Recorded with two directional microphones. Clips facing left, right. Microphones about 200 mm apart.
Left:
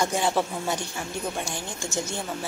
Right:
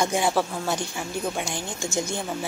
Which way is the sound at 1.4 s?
15° right (ahead or behind).